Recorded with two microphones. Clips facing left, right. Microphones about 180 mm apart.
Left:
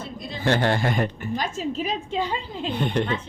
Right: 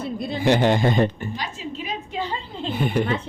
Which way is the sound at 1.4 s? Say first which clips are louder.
Left 5 dB; 45° left (ahead or behind).